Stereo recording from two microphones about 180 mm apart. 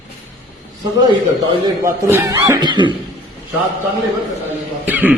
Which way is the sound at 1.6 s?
15° right (ahead or behind).